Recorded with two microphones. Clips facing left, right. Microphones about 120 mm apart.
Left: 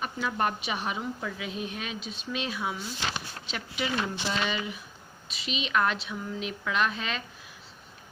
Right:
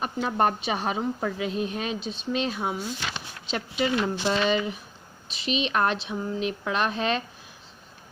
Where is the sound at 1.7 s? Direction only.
35° right (ahead or behind).